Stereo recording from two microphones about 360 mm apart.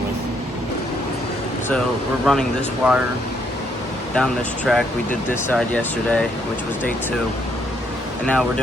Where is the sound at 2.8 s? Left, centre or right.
Centre.